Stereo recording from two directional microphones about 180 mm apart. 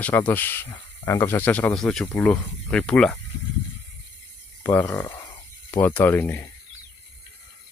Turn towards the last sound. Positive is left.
turn(degrees=10)  # may be behind; listen again after turning